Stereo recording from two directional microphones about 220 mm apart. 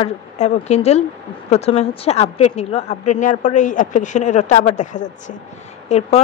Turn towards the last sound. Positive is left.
turn(degrees=30)  # may be behind; listen again after turning